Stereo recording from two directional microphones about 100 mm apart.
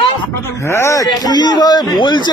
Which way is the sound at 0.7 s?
30° left (ahead or behind).